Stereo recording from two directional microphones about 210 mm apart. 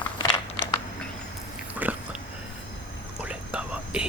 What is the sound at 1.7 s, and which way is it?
Dog, 5° right (ahead or behind).